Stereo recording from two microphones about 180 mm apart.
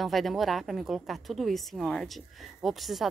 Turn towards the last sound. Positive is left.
turn(degrees=0)  # may be behind; listen again after turning